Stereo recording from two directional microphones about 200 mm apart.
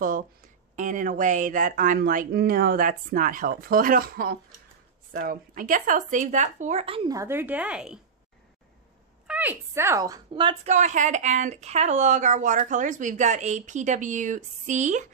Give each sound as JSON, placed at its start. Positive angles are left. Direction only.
{"t": 0.7, "sound": "speech", "side_deg": -40}
{"t": 7.2, "sound": "a woman's voice", "side_deg": -10}
{"t": 9.3, "sound": "speech", "side_deg": -10}
{"t": 10.7, "sound": "speech", "side_deg": -35}